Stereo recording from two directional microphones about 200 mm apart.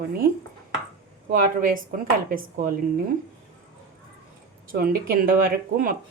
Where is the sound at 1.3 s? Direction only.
40° right (ahead or behind).